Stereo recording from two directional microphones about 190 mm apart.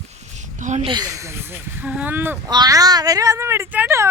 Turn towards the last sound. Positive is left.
turn(degrees=-10)  # may be behind; listen again after turning